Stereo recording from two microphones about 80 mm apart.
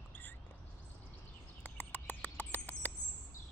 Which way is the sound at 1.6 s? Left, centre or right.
Centre.